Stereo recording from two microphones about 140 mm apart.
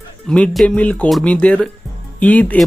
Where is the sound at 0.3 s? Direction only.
5° left (ahead or behind).